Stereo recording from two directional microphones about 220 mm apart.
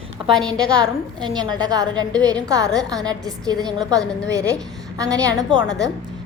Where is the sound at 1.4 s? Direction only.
20° right (ahead or behind).